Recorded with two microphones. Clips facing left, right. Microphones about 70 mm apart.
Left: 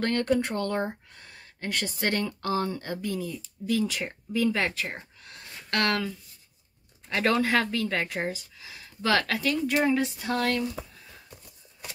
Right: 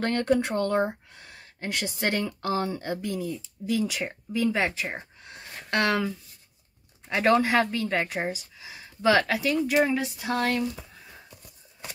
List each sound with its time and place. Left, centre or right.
0.0 s speech: right